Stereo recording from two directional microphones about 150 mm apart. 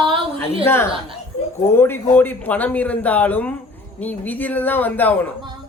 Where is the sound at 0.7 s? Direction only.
15° left (ahead or behind).